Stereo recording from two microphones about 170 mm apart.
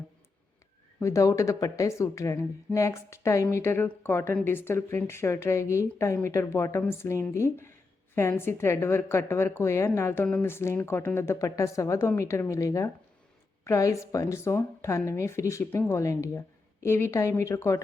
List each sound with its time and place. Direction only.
0.9 s a woman's voice: 15° left (ahead or behind)